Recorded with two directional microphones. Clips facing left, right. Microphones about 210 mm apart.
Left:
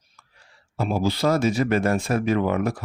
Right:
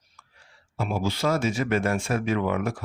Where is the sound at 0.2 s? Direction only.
35° left (ahead or behind).